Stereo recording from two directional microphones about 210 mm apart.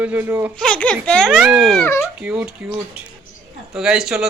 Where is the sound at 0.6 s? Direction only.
5° left (ahead or behind).